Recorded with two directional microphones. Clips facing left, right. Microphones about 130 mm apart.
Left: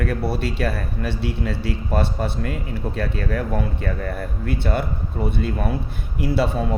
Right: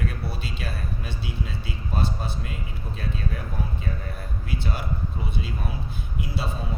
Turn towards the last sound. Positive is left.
turn(degrees=60)  # may be behind; listen again after turning